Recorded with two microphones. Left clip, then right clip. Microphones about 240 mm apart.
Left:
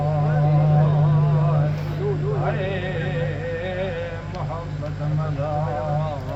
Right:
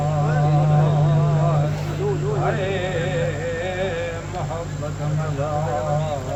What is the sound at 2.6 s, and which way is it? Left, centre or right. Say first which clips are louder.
Music: right 3 dB; centre.